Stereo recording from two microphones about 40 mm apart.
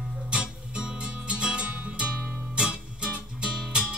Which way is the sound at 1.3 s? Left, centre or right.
Right.